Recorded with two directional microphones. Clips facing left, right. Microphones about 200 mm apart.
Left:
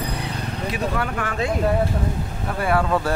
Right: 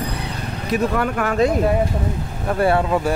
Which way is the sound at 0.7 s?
45° right (ahead or behind).